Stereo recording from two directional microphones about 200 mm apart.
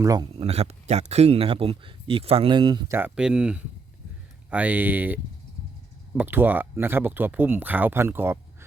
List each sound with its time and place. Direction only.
0.0 s speech: 15° right (ahead or behind)
0.3 s speech: 30° right (ahead or behind)
2.9 s speech: 5° right (ahead or behind)